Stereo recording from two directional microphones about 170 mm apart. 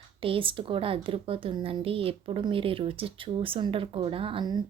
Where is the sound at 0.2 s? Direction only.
30° right (ahead or behind).